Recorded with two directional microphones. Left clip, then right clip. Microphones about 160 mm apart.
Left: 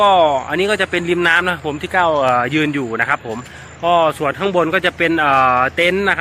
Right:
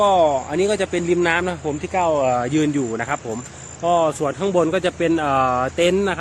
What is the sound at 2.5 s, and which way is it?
Speech, 15° right (ahead or behind).